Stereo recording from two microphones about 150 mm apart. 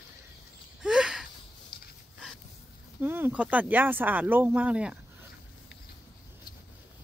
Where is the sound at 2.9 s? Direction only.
15° right (ahead or behind).